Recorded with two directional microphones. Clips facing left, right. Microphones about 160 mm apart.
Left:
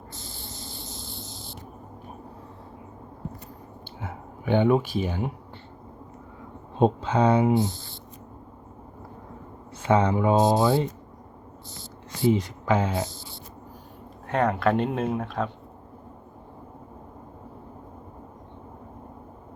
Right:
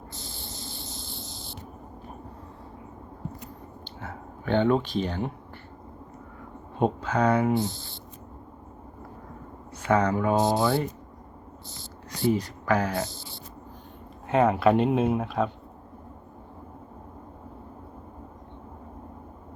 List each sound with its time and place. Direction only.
0.1 s spray: 75° right (ahead or behind)
4.0 s speech: 15° left (ahead or behind)
6.7 s speech: 25° left (ahead or behind)
7.7 s speech: 80° right
9.8 s speech: 25° left (ahead or behind)
12.2 s speech: 20° left (ahead or behind)
14.3 s speech: 5° right (ahead or behind)